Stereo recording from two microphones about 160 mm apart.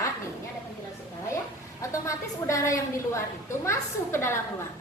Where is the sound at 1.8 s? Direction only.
20° left (ahead or behind).